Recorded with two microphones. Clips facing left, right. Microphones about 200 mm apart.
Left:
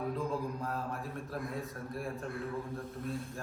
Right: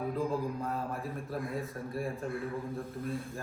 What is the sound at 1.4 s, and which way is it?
Speech, centre (ahead or behind).